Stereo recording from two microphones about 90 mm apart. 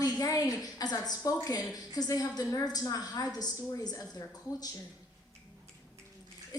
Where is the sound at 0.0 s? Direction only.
45° left (ahead or behind).